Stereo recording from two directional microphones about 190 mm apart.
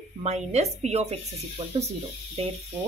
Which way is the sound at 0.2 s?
35° right (ahead or behind).